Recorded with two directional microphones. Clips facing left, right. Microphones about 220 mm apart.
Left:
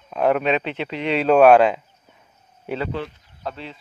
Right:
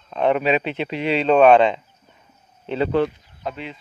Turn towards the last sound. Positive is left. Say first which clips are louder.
# right 2 dB
turn(degrees=-15)  # may be behind; listen again after turning